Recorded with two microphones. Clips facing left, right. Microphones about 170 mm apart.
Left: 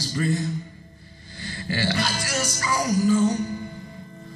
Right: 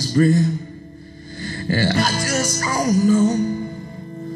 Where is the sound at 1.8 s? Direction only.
50° right (ahead or behind).